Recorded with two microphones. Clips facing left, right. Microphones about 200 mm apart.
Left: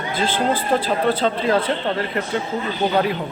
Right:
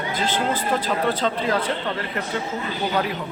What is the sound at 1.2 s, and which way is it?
Speech, 25° left (ahead or behind).